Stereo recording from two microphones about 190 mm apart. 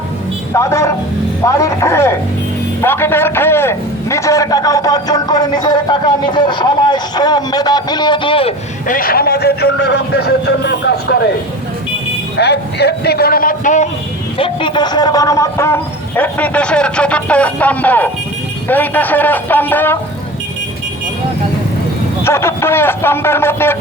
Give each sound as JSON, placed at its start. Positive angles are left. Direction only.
{"t": 0.5, "sound": "a man's voice", "side_deg": 15}
{"t": 8.9, "sound": "a man's voice", "side_deg": 50}
{"t": 12.4, "sound": "a man's voice", "side_deg": 60}
{"t": 14.3, "sound": "a man's voice", "side_deg": 25}
{"t": 22.2, "sound": "a man's voice", "side_deg": 15}